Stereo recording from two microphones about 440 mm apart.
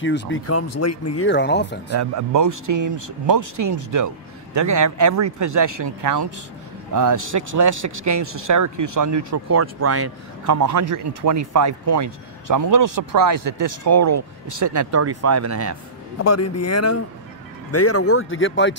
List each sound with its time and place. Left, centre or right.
0.0 s speech: left
2.0 s speech: right
16.3 s speech: left